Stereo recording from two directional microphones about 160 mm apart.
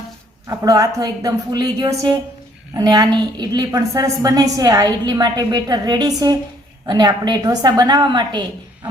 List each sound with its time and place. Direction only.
0.4 s a woman's voice: 20° right (ahead or behind)